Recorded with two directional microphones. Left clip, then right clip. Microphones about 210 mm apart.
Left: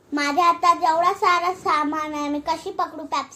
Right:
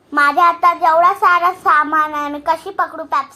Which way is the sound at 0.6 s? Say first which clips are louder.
Right 6 dB; 5° right (ahead or behind).